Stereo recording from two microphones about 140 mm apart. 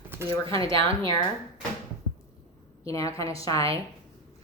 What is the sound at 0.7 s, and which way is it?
Speech, 35° right (ahead or behind).